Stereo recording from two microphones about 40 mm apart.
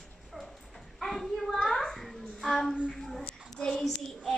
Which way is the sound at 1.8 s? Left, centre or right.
Centre.